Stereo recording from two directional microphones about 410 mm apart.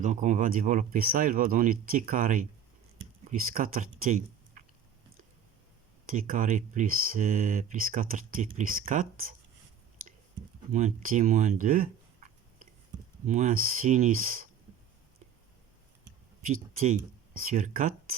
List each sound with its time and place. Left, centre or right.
0.0 s speech: centre
3.5 s speech: centre
6.1 s speech: centre
10.7 s speech: centre
16.5 s speech: centre